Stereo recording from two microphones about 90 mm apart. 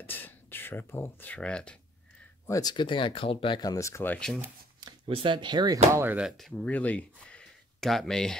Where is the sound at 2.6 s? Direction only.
60° left (ahead or behind); by 3.5 s 90° left.